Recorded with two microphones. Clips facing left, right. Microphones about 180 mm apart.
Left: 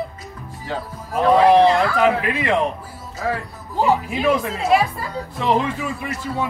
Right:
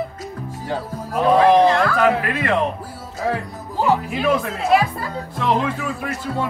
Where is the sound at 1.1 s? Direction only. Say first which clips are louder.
Even; 5° left (ahead or behind).